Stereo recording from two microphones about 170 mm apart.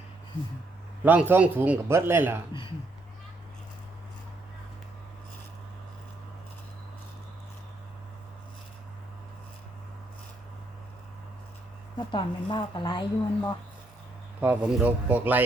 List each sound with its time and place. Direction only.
1.0 s a man's voice: 10° right (ahead or behind)
11.9 s speech: 30° left (ahead or behind)
14.4 s a man's voice: 5° right (ahead or behind)